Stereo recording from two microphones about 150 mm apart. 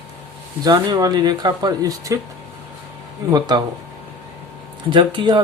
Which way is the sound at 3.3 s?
25° right (ahead or behind).